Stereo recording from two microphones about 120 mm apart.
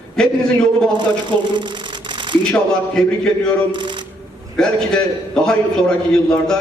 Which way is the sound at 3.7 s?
40° right (ahead or behind).